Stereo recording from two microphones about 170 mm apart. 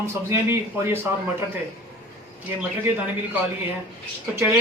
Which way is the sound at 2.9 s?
10° right (ahead or behind).